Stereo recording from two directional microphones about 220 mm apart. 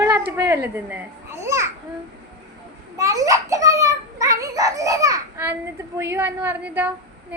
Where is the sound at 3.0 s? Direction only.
15° right (ahead or behind).